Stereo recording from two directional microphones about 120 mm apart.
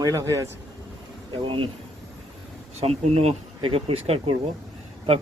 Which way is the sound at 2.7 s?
55° right (ahead or behind).